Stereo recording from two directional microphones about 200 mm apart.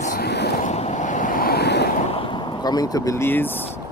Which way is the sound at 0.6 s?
35° left (ahead or behind).